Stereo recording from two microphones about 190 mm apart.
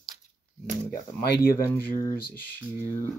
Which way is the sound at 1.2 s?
55° left (ahead or behind).